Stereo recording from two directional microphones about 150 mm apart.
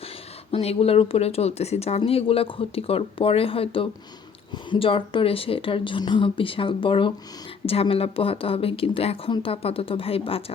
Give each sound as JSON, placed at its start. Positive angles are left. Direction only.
{"t": 0.5, "sound": "speech", "side_deg": 40}